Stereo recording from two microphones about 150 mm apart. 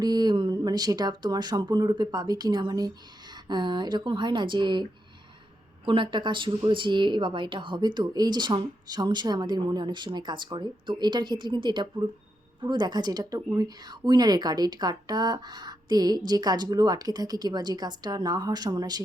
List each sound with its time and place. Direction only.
0.0 s a woman's voice: 25° right (ahead or behind)